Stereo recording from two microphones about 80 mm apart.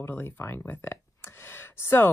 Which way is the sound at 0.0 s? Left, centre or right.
Left.